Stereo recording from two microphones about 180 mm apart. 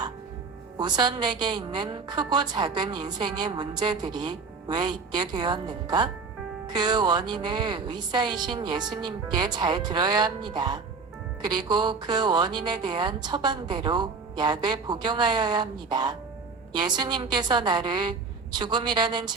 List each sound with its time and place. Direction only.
0.8 s a woman's voice: 25° right (ahead or behind)